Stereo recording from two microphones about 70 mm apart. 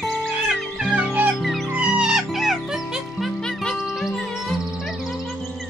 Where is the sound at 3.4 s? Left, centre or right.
Centre.